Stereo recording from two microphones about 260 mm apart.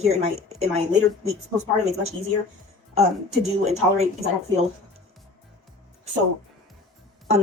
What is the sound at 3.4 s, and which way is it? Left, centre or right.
Speech, right.